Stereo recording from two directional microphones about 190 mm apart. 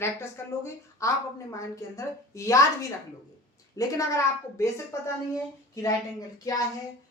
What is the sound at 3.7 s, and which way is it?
Speech, 15° left (ahead or behind).